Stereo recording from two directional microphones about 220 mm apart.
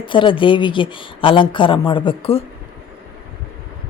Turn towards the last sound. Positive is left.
turn(degrees=25)  # may be behind; listen again after turning